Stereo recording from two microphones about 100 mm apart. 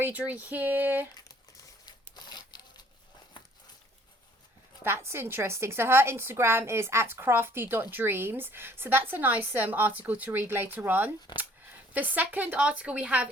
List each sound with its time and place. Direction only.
0.0 s speech: 15° right (ahead or behind)
1.8 s a sound: 45° left (ahead or behind)
4.8 s a woman's voice: 25° right (ahead or behind)